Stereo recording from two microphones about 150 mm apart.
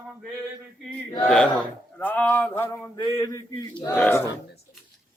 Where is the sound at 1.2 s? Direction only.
5° left (ahead or behind).